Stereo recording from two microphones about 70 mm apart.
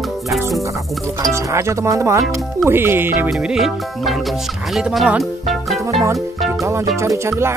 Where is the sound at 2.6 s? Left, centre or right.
Right.